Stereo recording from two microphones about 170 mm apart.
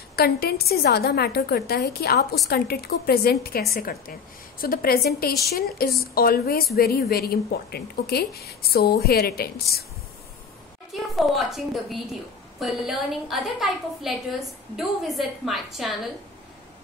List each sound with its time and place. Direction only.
0.1 s a woman's voice: 65° left (ahead or behind)
10.9 s a woman's voice: centre (ahead or behind)